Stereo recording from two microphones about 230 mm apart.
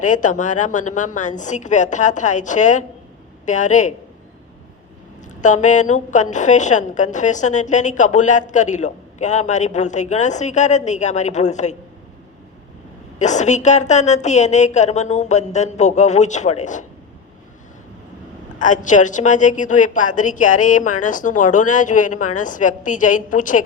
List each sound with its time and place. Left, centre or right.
0.0 s a woman's voice: left
5.3 s a woman's voice: left
13.1 s a woman's voice: left
18.6 s a woman's voice: left